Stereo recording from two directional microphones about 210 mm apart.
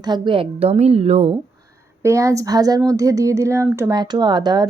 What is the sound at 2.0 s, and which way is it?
Speech, 15° right (ahead or behind).